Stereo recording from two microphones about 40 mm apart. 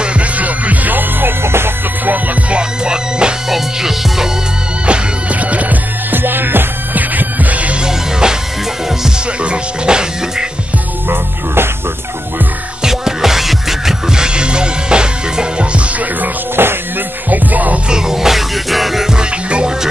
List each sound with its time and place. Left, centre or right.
0.0 s music: right
0.4 s music: right
1.4 s music: right
2.5 s music: right
3.4 s music: centre
4.8 s music: right
6.1 s music: right
7.8 s music: centre
9.4 s music: right
11.1 s music: right
12.8 s music: centre
16.6 s music: right
17.3 s music: right
17.8 s music: centre